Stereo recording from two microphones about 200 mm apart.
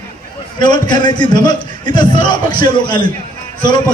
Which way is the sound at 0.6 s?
20° left (ahead or behind).